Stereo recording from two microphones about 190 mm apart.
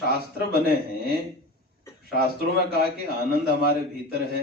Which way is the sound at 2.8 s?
55° left (ahead or behind).